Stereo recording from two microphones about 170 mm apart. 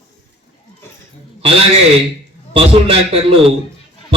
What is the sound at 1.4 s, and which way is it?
A man's voice, 35° right (ahead or behind).